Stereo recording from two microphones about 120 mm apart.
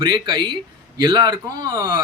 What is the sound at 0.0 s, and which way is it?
Speech, 40° right (ahead or behind).